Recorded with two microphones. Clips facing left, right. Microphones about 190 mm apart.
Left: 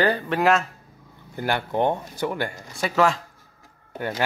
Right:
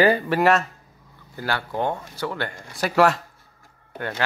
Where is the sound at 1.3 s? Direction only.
20° left (ahead or behind).